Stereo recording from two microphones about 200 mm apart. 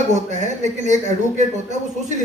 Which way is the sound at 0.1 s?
35° right (ahead or behind).